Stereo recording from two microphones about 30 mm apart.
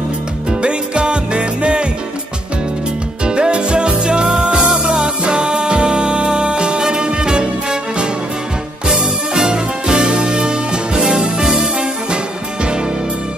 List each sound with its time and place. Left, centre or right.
0.5 s music: right
3.3 s music: right
11.0 s music: centre